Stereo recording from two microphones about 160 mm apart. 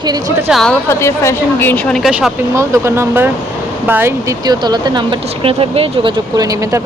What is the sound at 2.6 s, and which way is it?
Speech, 15° right (ahead or behind).